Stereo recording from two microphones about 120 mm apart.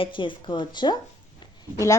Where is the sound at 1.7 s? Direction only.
25° left (ahead or behind).